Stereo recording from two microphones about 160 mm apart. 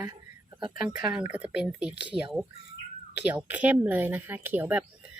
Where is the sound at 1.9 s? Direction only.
35° right (ahead or behind).